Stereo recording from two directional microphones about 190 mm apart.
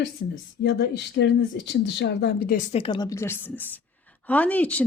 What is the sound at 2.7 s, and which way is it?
A woman's voice, 25° left (ahead or behind).